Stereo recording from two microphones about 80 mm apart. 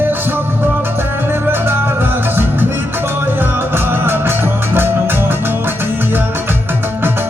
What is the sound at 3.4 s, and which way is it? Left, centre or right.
Music, right.